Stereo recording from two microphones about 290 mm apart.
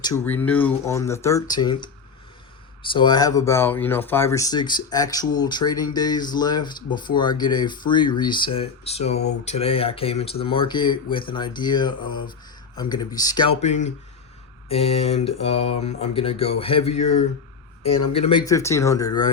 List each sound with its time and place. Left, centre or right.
0.0 s speech: centre